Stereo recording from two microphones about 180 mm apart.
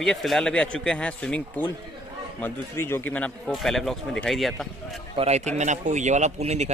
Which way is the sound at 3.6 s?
Centre (ahead or behind).